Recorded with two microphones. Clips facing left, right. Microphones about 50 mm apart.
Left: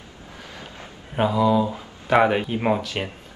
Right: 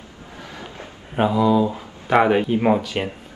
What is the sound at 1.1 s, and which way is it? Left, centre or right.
Speech, centre.